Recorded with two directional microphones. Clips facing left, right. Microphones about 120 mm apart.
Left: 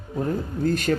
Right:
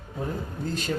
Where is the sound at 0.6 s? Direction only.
55° left (ahead or behind).